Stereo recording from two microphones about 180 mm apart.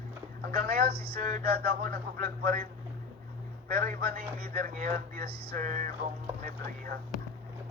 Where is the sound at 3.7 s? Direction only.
55° right (ahead or behind).